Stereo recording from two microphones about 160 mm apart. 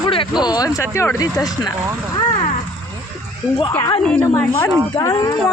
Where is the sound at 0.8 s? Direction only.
15° left (ahead or behind).